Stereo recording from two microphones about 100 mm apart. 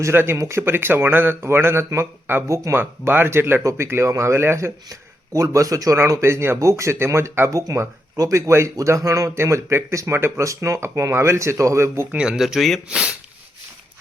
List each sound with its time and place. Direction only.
0.0 s speech: 25° right (ahead or behind)
12.1 s speech: 10° right (ahead or behind)